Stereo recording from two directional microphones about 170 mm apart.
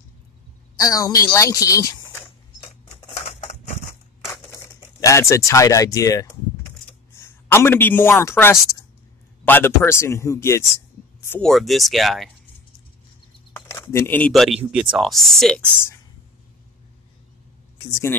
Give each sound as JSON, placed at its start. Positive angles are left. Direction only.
{"t": 0.7, "sound": "a woman's voice", "side_deg": 20}
{"t": 3.2, "sound": "typewriter", "side_deg": 45}
{"t": 4.7, "sound": "a man's voice", "side_deg": 20}
{"t": 11.5, "sound": "speech", "side_deg": 0}
{"t": 13.6, "sound": "speech", "side_deg": 20}